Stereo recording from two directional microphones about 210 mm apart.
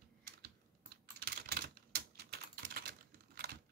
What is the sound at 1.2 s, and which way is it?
Typing, 50° right (ahead or behind).